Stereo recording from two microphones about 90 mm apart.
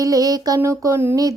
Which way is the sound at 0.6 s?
30° right (ahead or behind).